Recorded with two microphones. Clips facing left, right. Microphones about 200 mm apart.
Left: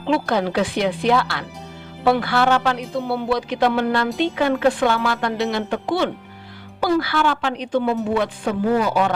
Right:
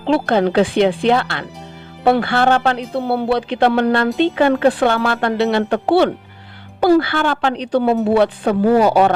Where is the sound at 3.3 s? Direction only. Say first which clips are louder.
Right 2 dB; 30° right (ahead or behind).